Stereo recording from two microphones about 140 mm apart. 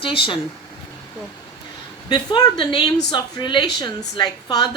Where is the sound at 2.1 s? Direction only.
30° left (ahead or behind).